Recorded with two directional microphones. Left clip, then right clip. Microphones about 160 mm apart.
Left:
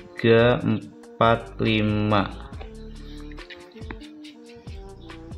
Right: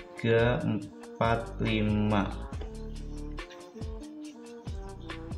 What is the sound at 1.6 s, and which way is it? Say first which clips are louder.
Speech: left 8 dB; 65° left (ahead or behind).